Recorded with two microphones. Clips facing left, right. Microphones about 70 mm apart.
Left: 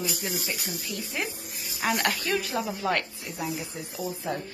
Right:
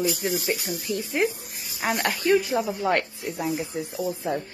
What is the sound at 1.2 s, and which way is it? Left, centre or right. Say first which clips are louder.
Speech: right 8 dB; right.